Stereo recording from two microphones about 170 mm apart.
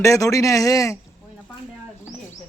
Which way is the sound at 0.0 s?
20° left (ahead or behind).